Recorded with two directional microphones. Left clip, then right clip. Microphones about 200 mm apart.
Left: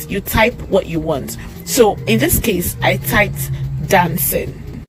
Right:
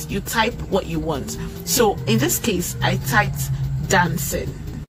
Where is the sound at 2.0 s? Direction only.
10° left (ahead or behind).